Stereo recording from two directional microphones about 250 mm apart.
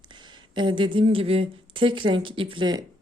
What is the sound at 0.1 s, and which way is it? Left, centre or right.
Speech, centre.